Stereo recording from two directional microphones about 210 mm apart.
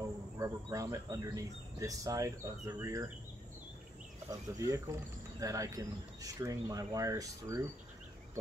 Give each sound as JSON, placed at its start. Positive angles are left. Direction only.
{"t": 0.4, "sound": "speech", "side_deg": -15}
{"t": 4.3, "sound": "speech", "side_deg": -15}